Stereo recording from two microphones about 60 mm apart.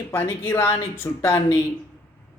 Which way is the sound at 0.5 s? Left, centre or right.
Left.